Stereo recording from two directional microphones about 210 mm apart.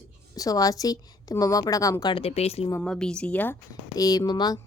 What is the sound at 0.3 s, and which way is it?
Speech, 15° left (ahead or behind).